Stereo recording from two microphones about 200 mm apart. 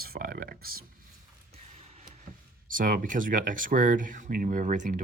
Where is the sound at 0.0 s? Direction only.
45° right (ahead or behind).